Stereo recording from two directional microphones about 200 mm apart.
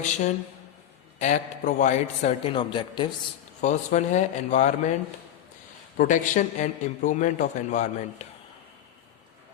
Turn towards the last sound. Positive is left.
turn(degrees=40)  # may be behind; listen again after turning